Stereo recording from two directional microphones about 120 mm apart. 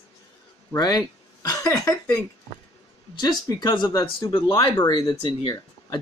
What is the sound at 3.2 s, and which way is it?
Speech, 35° left (ahead or behind).